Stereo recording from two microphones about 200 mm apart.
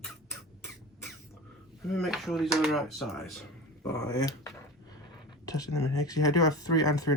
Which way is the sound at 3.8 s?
15° left (ahead or behind).